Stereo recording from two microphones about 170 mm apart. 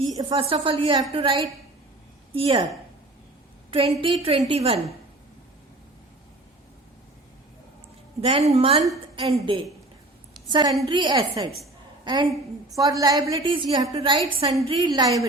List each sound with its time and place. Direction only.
0.0 s a woman's voice: 25° right (ahead or behind)
3.7 s a woman's voice: 30° right (ahead or behind)
8.2 s a woman's voice: 35° right (ahead or behind); by 15.3 s 20° right (ahead or behind)